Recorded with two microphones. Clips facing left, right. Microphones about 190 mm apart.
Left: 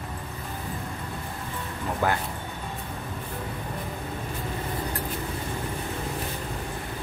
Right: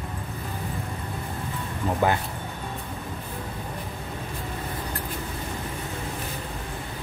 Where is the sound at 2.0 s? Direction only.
20° right (ahead or behind).